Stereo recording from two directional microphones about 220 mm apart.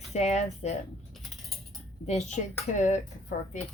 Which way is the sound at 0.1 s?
30° left (ahead or behind).